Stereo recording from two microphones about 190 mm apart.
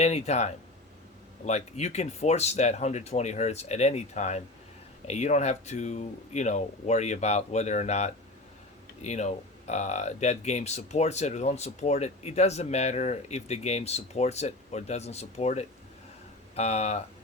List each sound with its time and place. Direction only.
0.0 s speech: 35° left (ahead or behind)